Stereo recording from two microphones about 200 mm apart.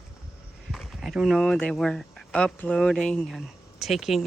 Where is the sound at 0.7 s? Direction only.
Centre (ahead or behind).